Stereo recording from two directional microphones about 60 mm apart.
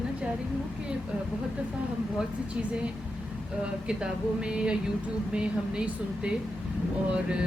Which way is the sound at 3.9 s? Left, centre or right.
Centre.